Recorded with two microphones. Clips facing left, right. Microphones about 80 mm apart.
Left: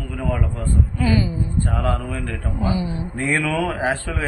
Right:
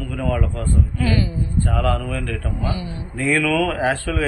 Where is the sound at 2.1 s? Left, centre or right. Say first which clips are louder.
Right 1 dB; left.